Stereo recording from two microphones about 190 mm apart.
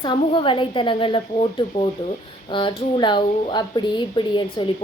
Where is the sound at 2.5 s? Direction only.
25° left (ahead or behind).